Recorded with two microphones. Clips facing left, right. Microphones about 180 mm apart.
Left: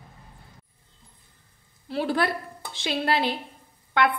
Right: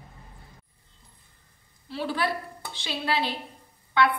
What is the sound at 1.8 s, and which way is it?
A woman's voice, 50° left (ahead or behind).